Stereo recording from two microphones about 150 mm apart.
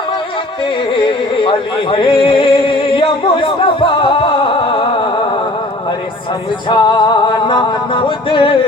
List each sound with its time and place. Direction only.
1.5 s speech: 35° left (ahead or behind)
2.9 s music: 35° left (ahead or behind)
6.7 s music: 25° left (ahead or behind)